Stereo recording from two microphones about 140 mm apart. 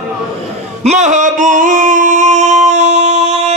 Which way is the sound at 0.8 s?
55° right (ahead or behind).